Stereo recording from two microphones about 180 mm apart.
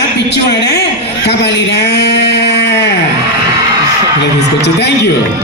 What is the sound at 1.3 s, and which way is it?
Sheep, 75° left (ahead or behind).